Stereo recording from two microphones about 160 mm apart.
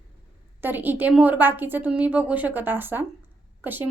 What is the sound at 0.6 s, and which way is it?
A woman's voice, 10° right (ahead or behind).